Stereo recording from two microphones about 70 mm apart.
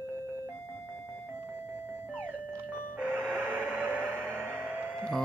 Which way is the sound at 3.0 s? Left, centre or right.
Right.